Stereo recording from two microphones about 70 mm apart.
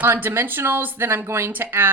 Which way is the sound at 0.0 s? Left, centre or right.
Right.